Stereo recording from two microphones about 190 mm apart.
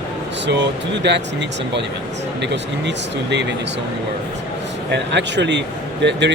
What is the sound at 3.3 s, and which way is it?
Speech, 70° right (ahead or behind).